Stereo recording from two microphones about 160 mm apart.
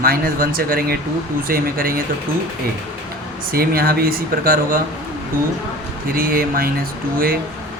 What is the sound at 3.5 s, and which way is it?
Speech, 70° right (ahead or behind).